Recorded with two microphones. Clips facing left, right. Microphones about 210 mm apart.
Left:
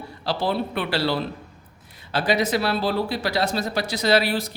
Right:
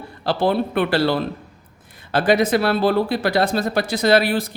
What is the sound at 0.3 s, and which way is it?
Speech, 55° right (ahead or behind).